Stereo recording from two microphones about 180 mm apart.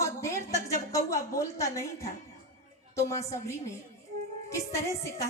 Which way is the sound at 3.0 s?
15° left (ahead or behind).